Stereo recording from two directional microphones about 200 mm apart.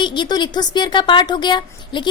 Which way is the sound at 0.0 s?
25° left (ahead or behind).